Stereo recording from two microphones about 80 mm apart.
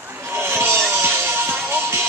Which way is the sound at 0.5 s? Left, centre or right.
Right.